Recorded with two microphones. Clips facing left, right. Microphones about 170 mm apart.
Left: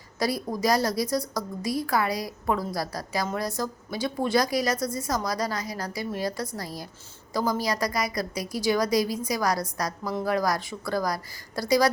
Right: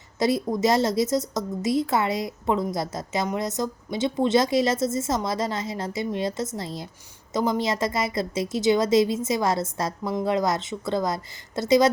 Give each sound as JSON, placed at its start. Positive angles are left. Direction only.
{"t": 0.2, "sound": "a woman's voice", "side_deg": -25}